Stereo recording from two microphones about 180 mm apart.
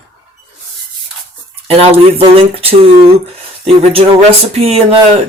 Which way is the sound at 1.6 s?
35° right (ahead or behind).